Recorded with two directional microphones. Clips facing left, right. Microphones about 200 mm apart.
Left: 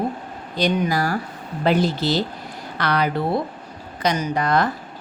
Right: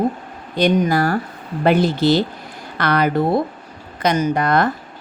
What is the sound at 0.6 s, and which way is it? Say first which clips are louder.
Speech: right 5 dB; 55° right (ahead or behind).